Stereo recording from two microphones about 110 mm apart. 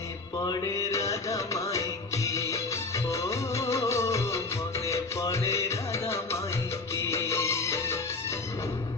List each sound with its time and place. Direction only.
0.3 s music: 35° left (ahead or behind)
6.9 s music of bollywood: 25° left (ahead or behind)